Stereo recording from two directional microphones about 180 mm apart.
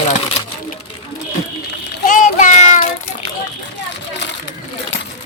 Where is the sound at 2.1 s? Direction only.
40° left (ahead or behind).